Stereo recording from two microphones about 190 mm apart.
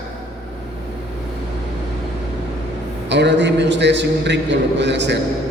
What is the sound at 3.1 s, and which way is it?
A man's voice, 65° right (ahead or behind).